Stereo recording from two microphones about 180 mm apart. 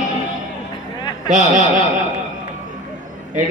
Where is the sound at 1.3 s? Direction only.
45° right (ahead or behind).